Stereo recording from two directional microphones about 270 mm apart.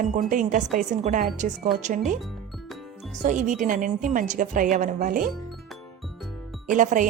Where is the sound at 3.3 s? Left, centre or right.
Right.